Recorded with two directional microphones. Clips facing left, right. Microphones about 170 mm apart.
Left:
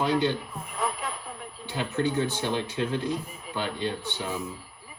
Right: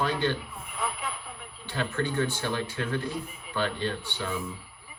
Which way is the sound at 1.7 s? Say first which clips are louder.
Left 2 dB; 15° left (ahead or behind).